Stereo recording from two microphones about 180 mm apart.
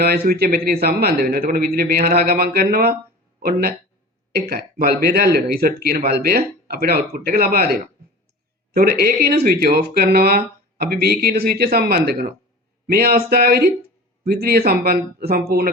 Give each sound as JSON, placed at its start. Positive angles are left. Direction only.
{"t": 0.0, "sound": "speech", "side_deg": -60}